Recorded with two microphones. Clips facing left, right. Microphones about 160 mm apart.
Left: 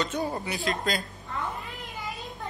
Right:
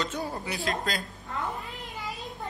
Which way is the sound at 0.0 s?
Centre (ahead or behind).